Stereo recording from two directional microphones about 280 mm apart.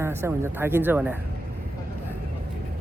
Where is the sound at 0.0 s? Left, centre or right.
Centre.